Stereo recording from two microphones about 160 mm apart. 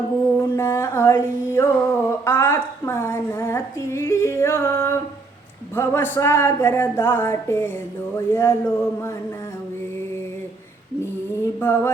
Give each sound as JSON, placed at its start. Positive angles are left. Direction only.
{"t": 0.3, "sound": "a sound", "side_deg": 15}
{"t": 5.7, "sound": "music", "side_deg": 15}
{"t": 11.6, "sound": "music", "side_deg": 15}